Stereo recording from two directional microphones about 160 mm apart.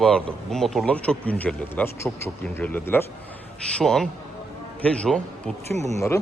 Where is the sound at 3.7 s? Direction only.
Centre (ahead or behind).